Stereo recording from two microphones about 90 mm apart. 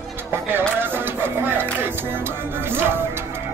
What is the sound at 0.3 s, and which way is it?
Music, 25° right (ahead or behind).